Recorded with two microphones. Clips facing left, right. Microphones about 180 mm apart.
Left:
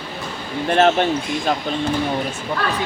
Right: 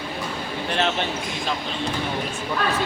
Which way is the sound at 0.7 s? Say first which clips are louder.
Left 9 dB; 50° left (ahead or behind).